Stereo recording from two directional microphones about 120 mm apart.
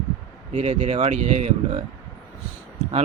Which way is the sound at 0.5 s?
60° right (ahead or behind).